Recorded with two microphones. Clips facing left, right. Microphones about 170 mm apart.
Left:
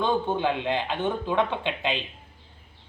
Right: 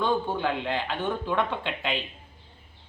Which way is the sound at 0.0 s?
20° left (ahead or behind).